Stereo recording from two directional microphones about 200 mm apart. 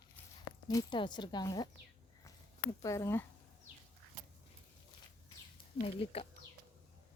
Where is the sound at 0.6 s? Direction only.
20° left (ahead or behind).